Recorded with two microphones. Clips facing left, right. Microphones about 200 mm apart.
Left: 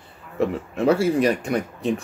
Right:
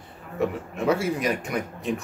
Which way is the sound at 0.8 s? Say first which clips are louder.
Left 5 dB; 30° left (ahead or behind).